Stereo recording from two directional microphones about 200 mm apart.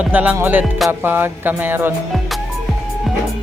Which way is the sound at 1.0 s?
10° right (ahead or behind).